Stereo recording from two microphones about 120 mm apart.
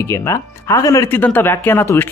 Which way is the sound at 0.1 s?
25° left (ahead or behind).